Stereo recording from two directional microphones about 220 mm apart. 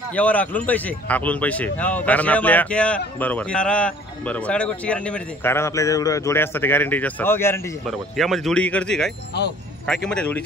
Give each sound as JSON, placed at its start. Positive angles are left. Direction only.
{"t": 0.1, "sound": "a man's voice", "side_deg": 5}
{"t": 7.8, "sound": "speech", "side_deg": 0}
{"t": 9.3, "sound": "speech", "side_deg": 50}
{"t": 9.8, "sound": "speech", "side_deg": 5}